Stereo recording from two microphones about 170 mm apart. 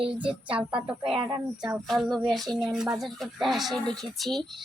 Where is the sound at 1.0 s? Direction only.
25° right (ahead or behind).